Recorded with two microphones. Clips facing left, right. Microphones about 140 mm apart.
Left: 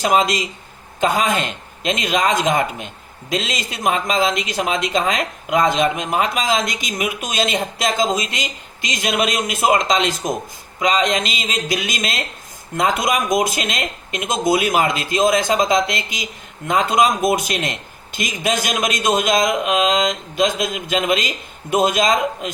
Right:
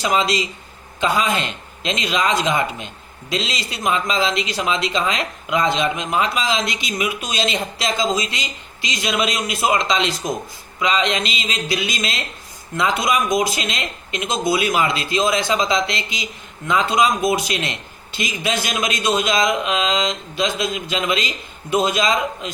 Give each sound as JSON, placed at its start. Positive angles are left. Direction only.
{"t": 0.0, "sound": "speech", "side_deg": 50}